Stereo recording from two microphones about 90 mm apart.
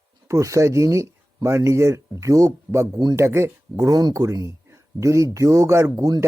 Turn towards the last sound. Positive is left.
turn(degrees=-35)  # may be behind; listen again after turning